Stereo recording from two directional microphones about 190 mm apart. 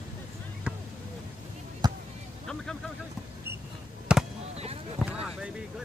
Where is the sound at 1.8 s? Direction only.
20° right (ahead or behind).